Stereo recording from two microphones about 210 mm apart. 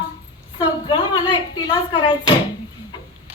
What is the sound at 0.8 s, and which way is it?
A woman's voice, 20° left (ahead or behind).